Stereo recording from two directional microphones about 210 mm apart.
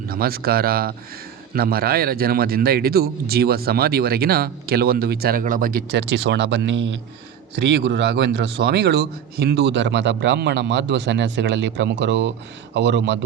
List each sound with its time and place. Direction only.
0.1 s a man's voice: 45° right (ahead or behind)